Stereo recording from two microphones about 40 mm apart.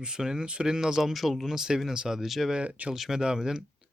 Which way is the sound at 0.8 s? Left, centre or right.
Centre.